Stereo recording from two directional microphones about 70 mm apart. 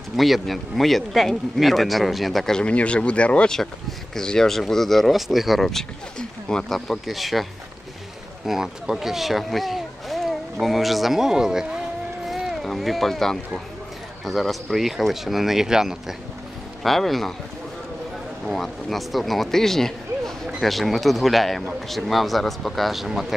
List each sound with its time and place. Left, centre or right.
0.1 s speech: centre
2.6 s speech: centre
8.5 s speech: centre
18.5 s speech: centre